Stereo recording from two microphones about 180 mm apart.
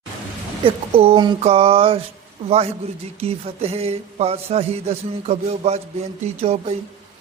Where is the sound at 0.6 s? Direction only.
30° right (ahead or behind).